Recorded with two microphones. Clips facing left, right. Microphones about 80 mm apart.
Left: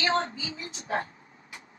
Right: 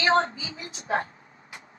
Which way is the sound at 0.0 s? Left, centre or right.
Right.